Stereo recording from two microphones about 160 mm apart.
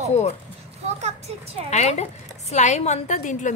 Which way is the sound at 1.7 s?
45° left (ahead or behind).